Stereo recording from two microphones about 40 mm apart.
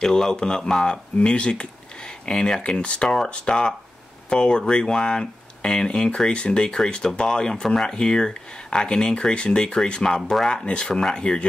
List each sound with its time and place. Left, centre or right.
0.0 s speech: centre